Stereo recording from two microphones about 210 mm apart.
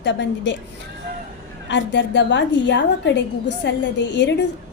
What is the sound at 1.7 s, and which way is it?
A woman's voice, 55° left (ahead or behind).